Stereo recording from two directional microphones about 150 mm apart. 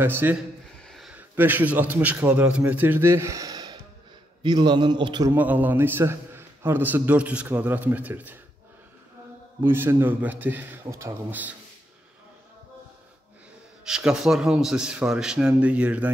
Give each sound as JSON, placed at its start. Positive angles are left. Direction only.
{"t": 0.0, "sound": "a man's voice", "side_deg": -15}
{"t": 0.8, "sound": "a sound", "side_deg": 0}
{"t": 1.1, "sound": "a man's voice", "side_deg": -15}
{"t": 5.3, "sound": "a man's voice", "side_deg": -10}
{"t": 9.6, "sound": "a man's voice", "side_deg": -15}
{"t": 13.8, "sound": "a man's voice", "side_deg": -5}